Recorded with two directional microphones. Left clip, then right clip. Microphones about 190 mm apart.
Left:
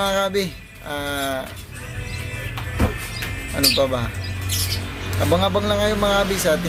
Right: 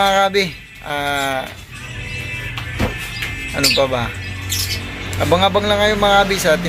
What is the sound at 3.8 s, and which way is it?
Speech, 10° left (ahead or behind).